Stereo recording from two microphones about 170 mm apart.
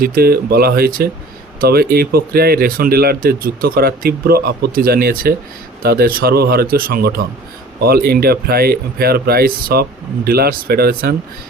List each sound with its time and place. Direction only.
0.0 s speech: 60° right (ahead or behind)